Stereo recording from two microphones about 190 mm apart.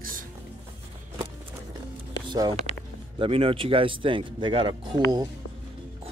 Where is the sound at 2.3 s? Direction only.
25° right (ahead or behind).